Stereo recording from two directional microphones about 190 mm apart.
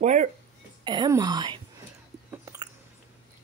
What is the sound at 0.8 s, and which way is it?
Speech, 20° right (ahead or behind).